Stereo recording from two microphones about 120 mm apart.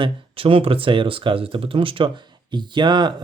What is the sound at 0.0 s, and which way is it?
Speech, 50° right (ahead or behind).